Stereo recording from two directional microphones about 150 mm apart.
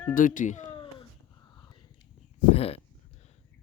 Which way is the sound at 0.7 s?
35° left (ahead or behind).